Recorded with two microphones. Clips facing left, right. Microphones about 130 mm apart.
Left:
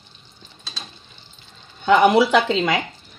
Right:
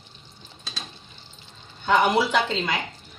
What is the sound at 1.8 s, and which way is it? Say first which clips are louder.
Speech: left 6 dB; 90° left.